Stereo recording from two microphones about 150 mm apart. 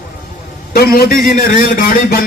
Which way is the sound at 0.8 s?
80° left.